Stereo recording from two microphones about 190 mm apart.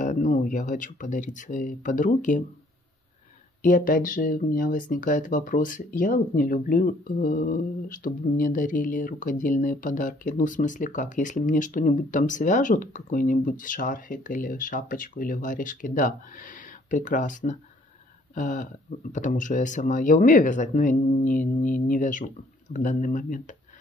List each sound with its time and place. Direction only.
0.0 s speech: 40° left (ahead or behind)
3.6 s speech: 45° left (ahead or behind)